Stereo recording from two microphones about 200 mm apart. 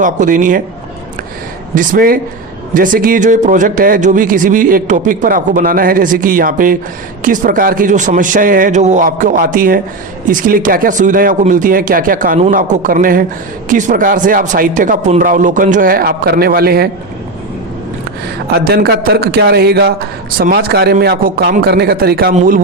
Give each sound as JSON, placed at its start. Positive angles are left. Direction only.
{"t": 0.0, "sound": "a man's voice", "side_deg": -40}
{"t": 1.7, "sound": "a man's voice", "side_deg": -45}
{"t": 18.5, "sound": "a man's voice", "side_deg": -50}